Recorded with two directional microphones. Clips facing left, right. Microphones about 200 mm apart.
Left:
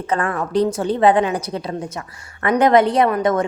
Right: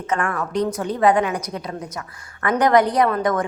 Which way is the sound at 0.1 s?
30° left (ahead or behind).